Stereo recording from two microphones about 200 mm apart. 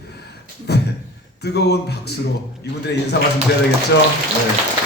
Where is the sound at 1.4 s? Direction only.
55° left (ahead or behind).